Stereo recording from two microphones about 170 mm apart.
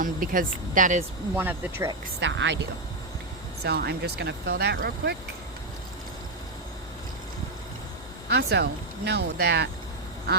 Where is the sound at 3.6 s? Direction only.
70° right (ahead or behind).